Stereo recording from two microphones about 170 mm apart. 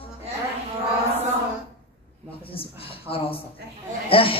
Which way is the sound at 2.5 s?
35° left (ahead or behind).